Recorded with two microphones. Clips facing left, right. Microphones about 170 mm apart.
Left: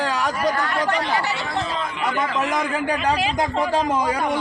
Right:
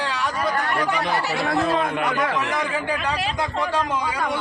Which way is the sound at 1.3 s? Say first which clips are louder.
Right 4 dB; 55° right (ahead or behind).